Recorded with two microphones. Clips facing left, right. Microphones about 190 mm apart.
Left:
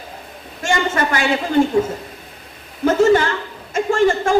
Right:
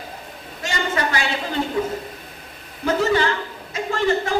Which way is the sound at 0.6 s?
50° left (ahead or behind).